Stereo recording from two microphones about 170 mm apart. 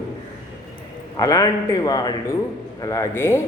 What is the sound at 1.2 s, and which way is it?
A man's voice, 20° left (ahead or behind).